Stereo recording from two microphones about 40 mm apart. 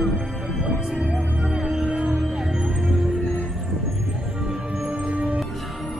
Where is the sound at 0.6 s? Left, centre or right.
Centre.